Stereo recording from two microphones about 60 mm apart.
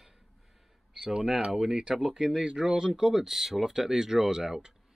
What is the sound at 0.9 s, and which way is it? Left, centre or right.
Speech, centre.